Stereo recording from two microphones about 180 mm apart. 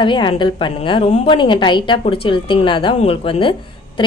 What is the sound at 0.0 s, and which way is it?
A woman's voice, 25° left (ahead or behind).